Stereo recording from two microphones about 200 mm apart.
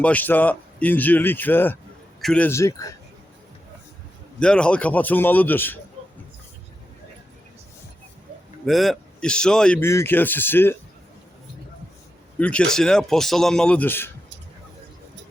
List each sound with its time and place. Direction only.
0.0 s a man's voice: 10° left (ahead or behind)
4.4 s a man's voice: 5° left (ahead or behind)
8.6 s a man's voice: centre (ahead or behind)
12.4 s a man's voice: 5° left (ahead or behind)